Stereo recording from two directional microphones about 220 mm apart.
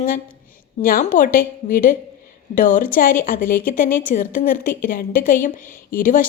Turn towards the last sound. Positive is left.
turn(degrees=40)  # may be behind; listen again after turning